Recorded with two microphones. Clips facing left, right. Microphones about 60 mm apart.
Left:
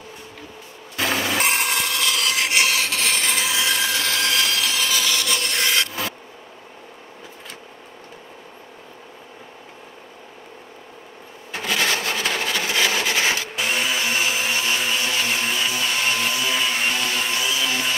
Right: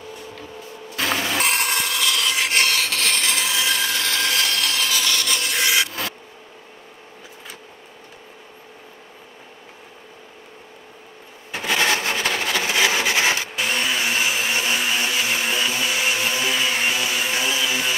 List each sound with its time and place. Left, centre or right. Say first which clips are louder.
0.9 s rub: left 1 dB; centre
11.5 s a sound: right 2 dB; centre
12.2 s rub: right 1 dB; centre
13.6 s vehicle: even; centre
14.5 s blender: right 1 dB; centre
15.6 s a sound: right 1 dB; centre